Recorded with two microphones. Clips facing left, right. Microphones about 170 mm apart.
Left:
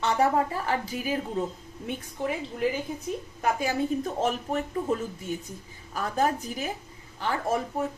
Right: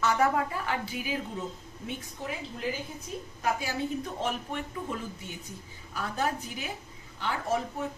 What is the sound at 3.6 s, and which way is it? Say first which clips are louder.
Speech: left 5 dB; 45° left (ahead or behind).